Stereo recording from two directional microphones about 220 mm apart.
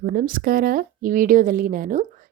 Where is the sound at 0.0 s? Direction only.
40° right (ahead or behind).